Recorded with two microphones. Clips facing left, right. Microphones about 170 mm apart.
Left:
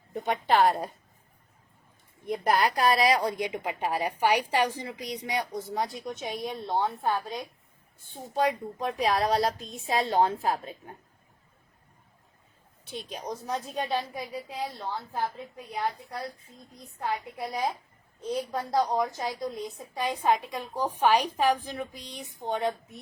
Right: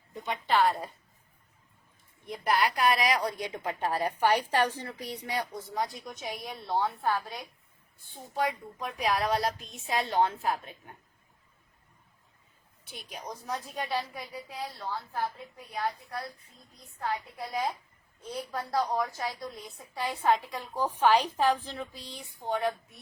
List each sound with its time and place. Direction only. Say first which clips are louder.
0.1 s a woman's voice: left 4 dB; 60° left (ahead or behind)
2.4 s a woman's voice: left 2 dB; 40° left (ahead or behind); by 5.5 s 20° left (ahead or behind)
5.5 s a woman's voice: left 2 dB; 30° left (ahead or behind)
12.8 s a woman's voice: left 5 dB; 25° left (ahead or behind)
18.5 s a woman's voice: left 2 dB; 20° left (ahead or behind)